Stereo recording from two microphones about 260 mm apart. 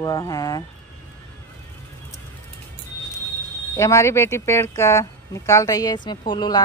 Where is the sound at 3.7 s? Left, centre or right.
Centre.